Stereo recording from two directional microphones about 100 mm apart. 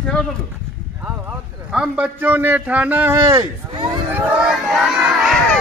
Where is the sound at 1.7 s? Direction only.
15° right (ahead or behind).